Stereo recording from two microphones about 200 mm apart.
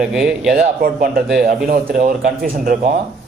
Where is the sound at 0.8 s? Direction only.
45° right (ahead or behind).